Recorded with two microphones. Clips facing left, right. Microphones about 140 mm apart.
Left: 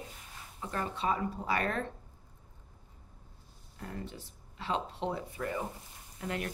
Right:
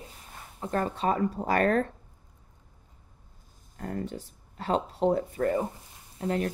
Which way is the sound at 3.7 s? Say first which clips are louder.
Right 8 dB; 45° right (ahead or behind).